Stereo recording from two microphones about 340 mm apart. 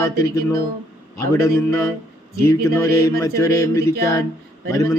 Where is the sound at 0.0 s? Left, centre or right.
Centre.